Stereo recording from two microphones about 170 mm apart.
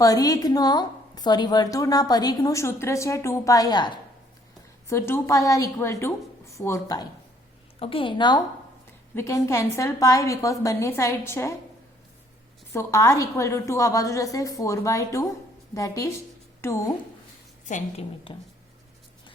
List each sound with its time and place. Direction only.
0.0 s a woman's voice: 20° left (ahead or behind)
4.9 s a woman's voice: 15° left (ahead or behind)
7.8 s a woman's voice: 30° left (ahead or behind); by 11.5 s 15° left (ahead or behind)
12.7 s a woman's voice: 20° left (ahead or behind)
17.7 s a woman's voice: 45° left (ahead or behind)
18.3 s a woman's voice: 30° left (ahead or behind)